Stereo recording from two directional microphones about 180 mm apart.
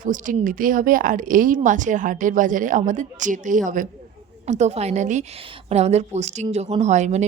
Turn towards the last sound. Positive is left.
turn(degrees=-40)  # may be behind; listen again after turning